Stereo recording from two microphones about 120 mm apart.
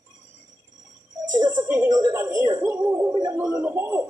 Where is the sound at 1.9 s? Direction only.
35° right (ahead or behind).